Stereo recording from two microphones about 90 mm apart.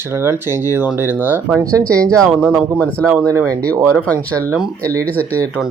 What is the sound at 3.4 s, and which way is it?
Speech, 15° left (ahead or behind).